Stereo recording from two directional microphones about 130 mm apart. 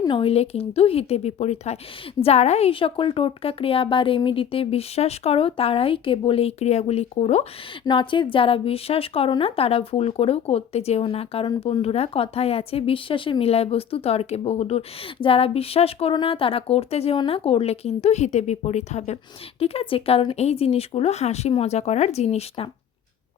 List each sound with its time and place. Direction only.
0.1 s a woman's voice: 45° left (ahead or behind)
7.9 s a woman's voice: 40° left (ahead or behind)